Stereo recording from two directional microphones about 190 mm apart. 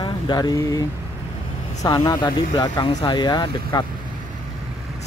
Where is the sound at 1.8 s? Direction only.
20° left (ahead or behind).